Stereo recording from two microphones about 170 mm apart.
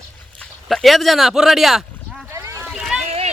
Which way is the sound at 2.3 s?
15° right (ahead or behind).